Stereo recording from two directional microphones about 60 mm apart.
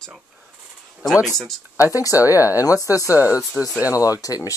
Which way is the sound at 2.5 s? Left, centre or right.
Left.